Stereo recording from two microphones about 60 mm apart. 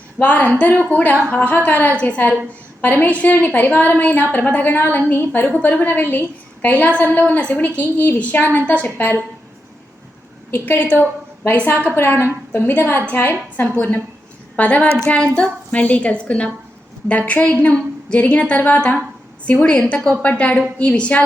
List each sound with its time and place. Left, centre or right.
0.2 s a woman's voice: left
10.5 s a woman's voice: left